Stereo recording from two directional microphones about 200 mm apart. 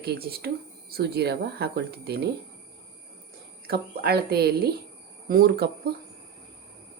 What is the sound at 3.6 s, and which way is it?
Speech, 50° right (ahead or behind).